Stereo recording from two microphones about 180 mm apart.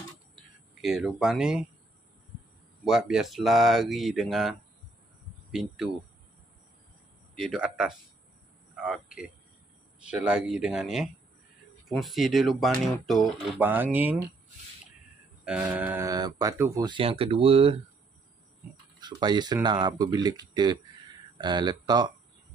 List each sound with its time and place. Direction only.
0.7 s speech: centre (ahead or behind)
2.8 s speech: 5° right (ahead or behind)
7.3 s a man's voice: centre (ahead or behind)
15.4 s speech: 5° right (ahead or behind)
16.1 s speech: 20° right (ahead or behind)
16.8 s speech: 30° right (ahead or behind)
18.9 s speech: 25° right (ahead or behind)